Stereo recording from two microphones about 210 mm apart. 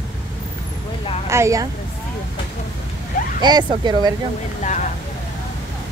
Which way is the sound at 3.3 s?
20° right (ahead or behind).